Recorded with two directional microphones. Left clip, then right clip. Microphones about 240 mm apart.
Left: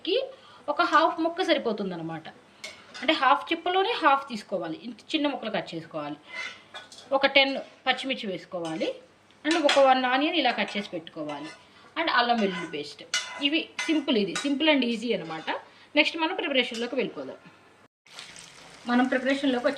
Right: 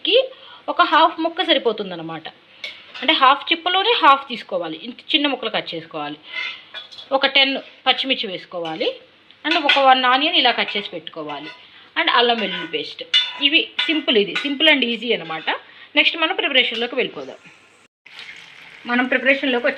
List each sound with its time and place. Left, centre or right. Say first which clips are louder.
0.0 s speech: right 11 dB; centre
18.9 s speech: right 8 dB; right